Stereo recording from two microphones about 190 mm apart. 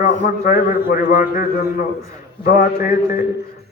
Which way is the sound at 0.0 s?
45° left (ahead or behind).